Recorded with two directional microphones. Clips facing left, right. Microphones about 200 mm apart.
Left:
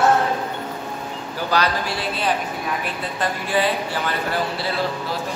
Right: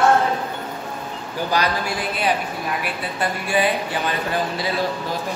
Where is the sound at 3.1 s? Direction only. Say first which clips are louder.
Even; 15° right (ahead or behind).